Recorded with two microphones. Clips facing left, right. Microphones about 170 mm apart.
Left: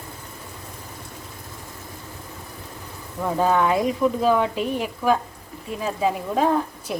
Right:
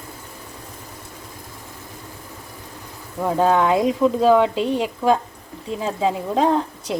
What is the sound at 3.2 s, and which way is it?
Speech, 20° right (ahead or behind).